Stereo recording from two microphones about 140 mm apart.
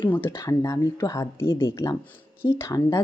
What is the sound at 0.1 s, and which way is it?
Speech, 20° left (ahead or behind).